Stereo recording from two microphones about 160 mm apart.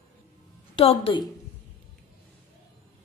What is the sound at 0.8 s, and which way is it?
Speech, 35° left (ahead or behind).